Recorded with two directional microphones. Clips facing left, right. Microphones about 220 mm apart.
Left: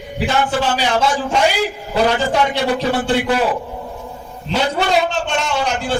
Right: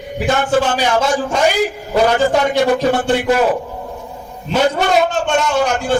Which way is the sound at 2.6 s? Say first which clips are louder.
Right 3 dB; 45° right (ahead or behind).